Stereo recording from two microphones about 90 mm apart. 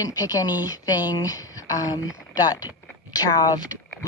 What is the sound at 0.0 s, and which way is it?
Speech, 40° left (ahead or behind).